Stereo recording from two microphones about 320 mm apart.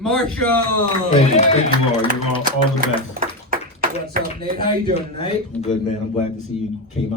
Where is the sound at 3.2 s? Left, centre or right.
Right.